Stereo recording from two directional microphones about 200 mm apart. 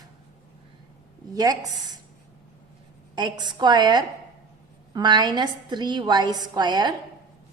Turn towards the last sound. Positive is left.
turn(degrees=-20)  # may be behind; listen again after turning